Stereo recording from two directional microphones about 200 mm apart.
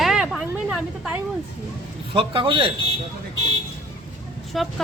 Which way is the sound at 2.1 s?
25° right (ahead or behind).